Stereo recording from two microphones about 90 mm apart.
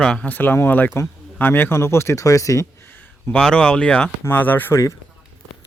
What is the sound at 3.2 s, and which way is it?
Speech, 10° left (ahead or behind).